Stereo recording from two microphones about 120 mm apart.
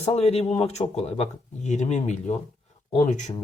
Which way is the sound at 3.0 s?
90° left.